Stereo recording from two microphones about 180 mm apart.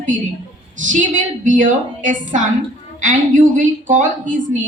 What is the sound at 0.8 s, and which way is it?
A woman's voice, 45° right (ahead or behind).